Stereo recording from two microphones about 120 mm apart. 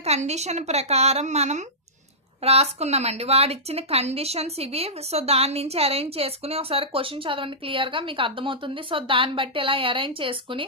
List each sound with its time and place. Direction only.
0.0 s a woman's voice: 65° right (ahead or behind)
2.4 s a woman's voice: 60° right (ahead or behind)